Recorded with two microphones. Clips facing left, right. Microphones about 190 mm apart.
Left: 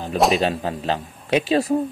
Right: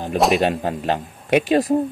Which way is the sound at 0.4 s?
15° right (ahead or behind).